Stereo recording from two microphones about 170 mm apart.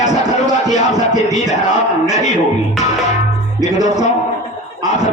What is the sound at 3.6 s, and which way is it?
Speech, 20° right (ahead or behind).